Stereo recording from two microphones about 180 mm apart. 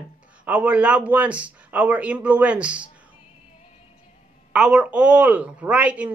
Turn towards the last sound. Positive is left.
turn(degrees=-5)  # may be behind; listen again after turning